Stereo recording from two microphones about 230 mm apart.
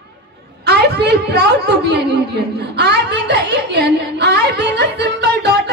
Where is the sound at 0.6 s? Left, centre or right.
Right.